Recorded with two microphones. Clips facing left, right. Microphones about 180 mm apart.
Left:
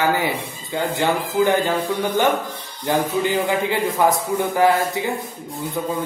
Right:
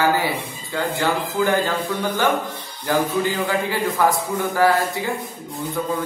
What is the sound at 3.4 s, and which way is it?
Speech, 20° left (ahead or behind).